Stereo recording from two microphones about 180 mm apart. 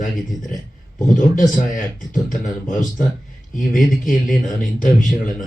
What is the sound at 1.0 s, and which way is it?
Speech, 45° left (ahead or behind).